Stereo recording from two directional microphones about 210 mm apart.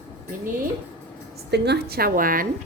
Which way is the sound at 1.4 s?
50° right (ahead or behind).